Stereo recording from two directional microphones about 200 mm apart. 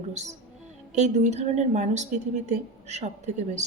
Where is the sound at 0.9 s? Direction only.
35° right (ahead or behind).